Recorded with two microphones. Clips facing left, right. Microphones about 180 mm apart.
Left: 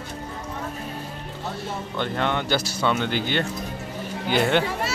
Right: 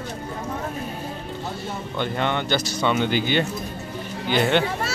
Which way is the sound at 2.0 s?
Centre (ahead or behind).